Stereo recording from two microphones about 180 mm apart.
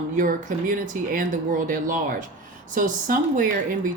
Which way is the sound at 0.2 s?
50° right (ahead or behind).